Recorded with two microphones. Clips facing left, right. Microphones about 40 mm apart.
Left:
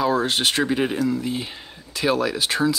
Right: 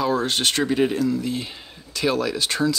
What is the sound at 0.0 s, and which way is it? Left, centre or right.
Speech, centre.